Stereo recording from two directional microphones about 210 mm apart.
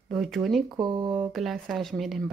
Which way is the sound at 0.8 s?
20° right (ahead or behind).